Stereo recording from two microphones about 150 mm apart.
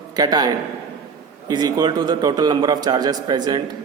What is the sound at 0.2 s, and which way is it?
A man's voice, 25° right (ahead or behind).